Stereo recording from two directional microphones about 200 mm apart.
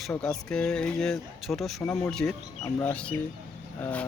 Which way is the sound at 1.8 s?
15° left (ahead or behind).